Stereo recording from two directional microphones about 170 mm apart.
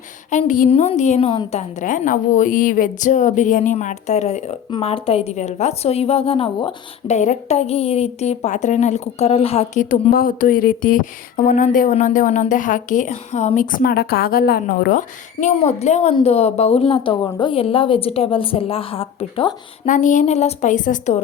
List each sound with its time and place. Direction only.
0.3 s a woman's voice: 45° left (ahead or behind)
0.7 s a woman's voice: 40° left (ahead or behind)
1.8 s a woman's voice: 50° left (ahead or behind); by 6.7 s 30° left (ahead or behind)
7.1 s a woman's voice: 45° left (ahead or behind)
9.9 s a woman's voice: 55° left (ahead or behind); by 19.9 s 30° left (ahead or behind)
19.9 s a woman's voice: 45° left (ahead or behind)